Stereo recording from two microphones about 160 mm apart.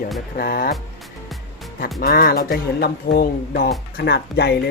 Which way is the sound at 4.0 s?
90° left.